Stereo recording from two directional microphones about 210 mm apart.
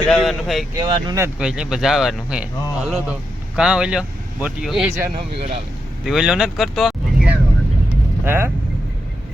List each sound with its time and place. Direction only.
0.0 s a sound: 5° left (ahead or behind)
0.8 s speech: 20° right (ahead or behind)
1.4 s speech: 5° right (ahead or behind)
5.4 s speech: 30° right (ahead or behind)
6.1 s speech: centre (ahead or behind)